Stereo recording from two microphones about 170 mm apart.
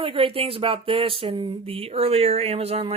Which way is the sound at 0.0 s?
30° right (ahead or behind).